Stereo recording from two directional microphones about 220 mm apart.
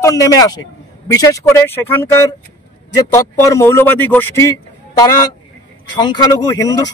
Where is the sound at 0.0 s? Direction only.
15° left (ahead or behind).